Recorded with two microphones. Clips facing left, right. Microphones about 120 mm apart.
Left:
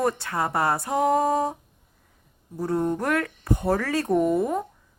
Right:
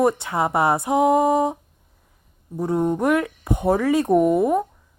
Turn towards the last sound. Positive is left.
turn(degrees=-15)  # may be behind; listen again after turning